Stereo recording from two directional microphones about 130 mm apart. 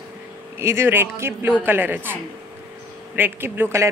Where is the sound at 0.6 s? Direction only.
20° right (ahead or behind).